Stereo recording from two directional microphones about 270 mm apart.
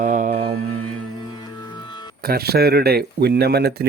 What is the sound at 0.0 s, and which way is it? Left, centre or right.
Mantra, right.